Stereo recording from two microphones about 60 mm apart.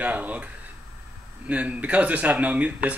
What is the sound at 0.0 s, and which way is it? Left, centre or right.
Speech, right.